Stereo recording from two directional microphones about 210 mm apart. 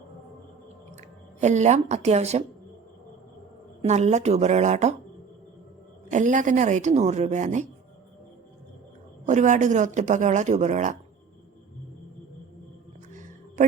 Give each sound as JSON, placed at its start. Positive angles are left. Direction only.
{"t": 1.4, "sound": "speech", "side_deg": -35}
{"t": 3.8, "sound": "speech", "side_deg": -35}
{"t": 6.1, "sound": "speech", "side_deg": -35}
{"t": 9.2, "sound": "speech", "side_deg": -35}
{"t": 13.6, "sound": "music", "side_deg": -35}